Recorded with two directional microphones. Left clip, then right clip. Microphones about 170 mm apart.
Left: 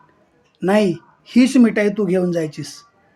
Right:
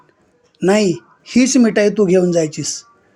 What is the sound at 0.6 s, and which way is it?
Speech, 25° right (ahead or behind).